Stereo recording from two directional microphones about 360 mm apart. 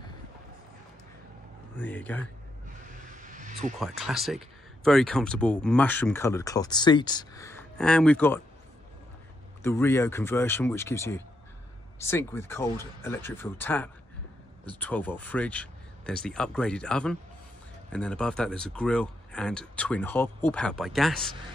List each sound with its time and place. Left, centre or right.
1.8 s speech: centre
3.2 s vehicle: right
3.8 s speech: centre
9.6 s speech: centre